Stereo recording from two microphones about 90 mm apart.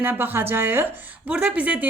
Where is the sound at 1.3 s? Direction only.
15° right (ahead or behind).